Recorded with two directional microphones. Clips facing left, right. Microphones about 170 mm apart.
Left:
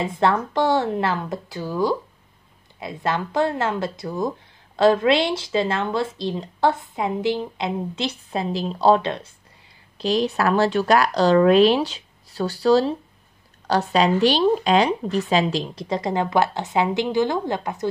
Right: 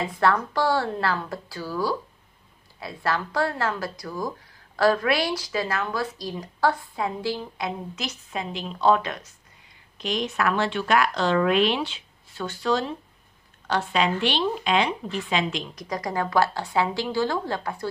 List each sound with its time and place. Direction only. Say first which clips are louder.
0.0 s speech: left 2 dB; 25° left (ahead or behind)